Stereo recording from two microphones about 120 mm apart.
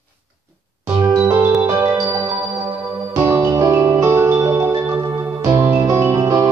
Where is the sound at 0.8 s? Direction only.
20° right (ahead or behind).